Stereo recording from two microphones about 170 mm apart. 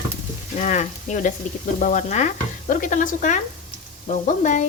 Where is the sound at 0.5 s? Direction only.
45° left (ahead or behind).